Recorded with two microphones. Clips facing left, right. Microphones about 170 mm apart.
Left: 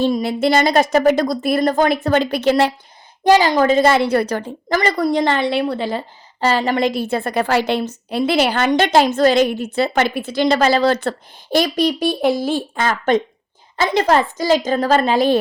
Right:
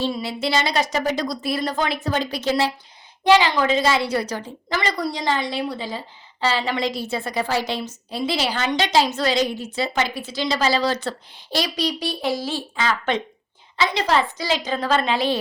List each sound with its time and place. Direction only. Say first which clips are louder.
0.0 s a woman's voice: left 8 dB; 50° left (ahead or behind)
3.2 s a woman's voice: left 4 dB; 40° left (ahead or behind); by 6.0 s 65° left (ahead or behind)
6.4 s a woman's voice: left 6 dB; 45° left (ahead or behind)